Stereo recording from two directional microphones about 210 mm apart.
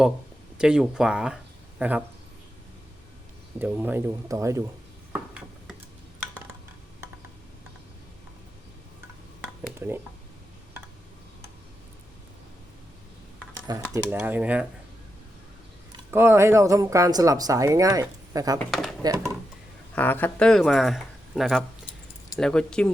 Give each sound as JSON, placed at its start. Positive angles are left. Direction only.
{"t": 0.6, "sound": "speech", "side_deg": -5}
{"t": 3.6, "sound": "speech", "side_deg": -10}
{"t": 5.1, "sound": "a sound", "side_deg": -5}
{"t": 9.7, "sound": "speech", "side_deg": -10}
{"t": 13.9, "sound": "speech", "side_deg": -10}
{"t": 15.9, "sound": "speech", "side_deg": -10}
{"t": 18.6, "sound": "speech", "side_deg": 0}
{"t": 20.0, "sound": "speech", "side_deg": 10}